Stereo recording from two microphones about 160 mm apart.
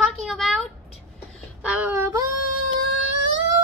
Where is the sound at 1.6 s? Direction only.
10° right (ahead or behind).